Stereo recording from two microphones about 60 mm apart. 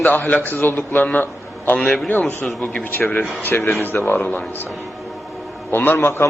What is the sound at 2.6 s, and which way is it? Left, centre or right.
A man's voice, left.